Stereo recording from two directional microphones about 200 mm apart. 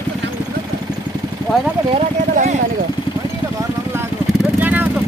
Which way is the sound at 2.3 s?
35° right (ahead or behind).